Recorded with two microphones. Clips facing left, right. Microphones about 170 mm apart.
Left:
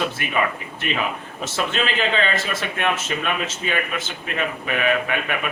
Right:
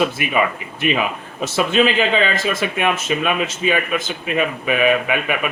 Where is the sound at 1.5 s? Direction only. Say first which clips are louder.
Right 7 dB; 10° right (ahead or behind).